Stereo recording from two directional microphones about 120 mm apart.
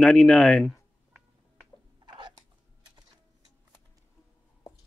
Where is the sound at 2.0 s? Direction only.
40° right (ahead or behind).